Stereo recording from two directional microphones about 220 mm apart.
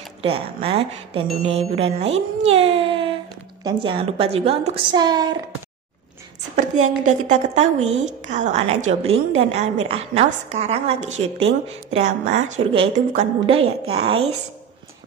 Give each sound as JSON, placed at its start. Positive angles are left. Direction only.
{"t": 0.2, "sound": "a woman's voice", "side_deg": -25}
{"t": 7.1, "sound": "a woman's voice", "side_deg": -30}